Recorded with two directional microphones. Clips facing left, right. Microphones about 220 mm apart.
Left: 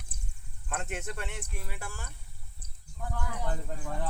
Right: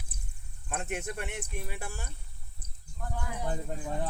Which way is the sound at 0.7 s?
15° right (ahead or behind).